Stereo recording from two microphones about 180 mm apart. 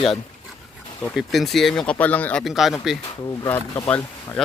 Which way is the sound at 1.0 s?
Centre (ahead or behind).